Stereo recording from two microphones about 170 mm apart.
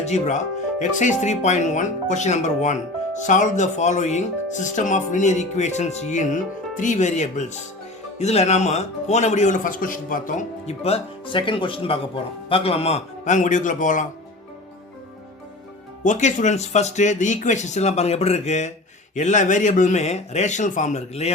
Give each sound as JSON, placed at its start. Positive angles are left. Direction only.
{"t": 0.0, "sound": "a man's voice", "side_deg": 45}
{"t": 16.0, "sound": "speech", "side_deg": 45}